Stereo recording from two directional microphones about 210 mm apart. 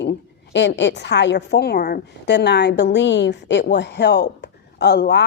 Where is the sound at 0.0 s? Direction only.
55° left (ahead or behind).